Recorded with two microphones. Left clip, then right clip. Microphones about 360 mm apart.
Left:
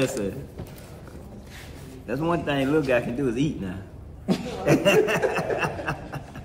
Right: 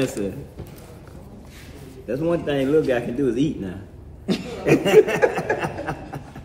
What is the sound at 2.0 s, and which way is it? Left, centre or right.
A man's voice, centre.